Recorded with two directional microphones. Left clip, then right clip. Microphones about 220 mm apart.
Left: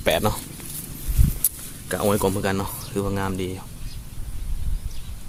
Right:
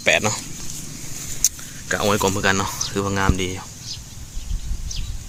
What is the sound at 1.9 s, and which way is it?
Speech, 10° left (ahead or behind).